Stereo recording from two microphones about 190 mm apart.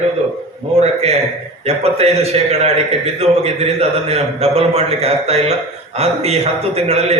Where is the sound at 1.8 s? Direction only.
35° right (ahead or behind).